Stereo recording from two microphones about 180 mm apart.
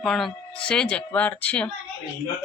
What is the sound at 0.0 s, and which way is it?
Speech, centre (ahead or behind).